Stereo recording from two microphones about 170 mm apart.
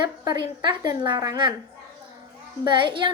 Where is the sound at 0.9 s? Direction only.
25° right (ahead or behind).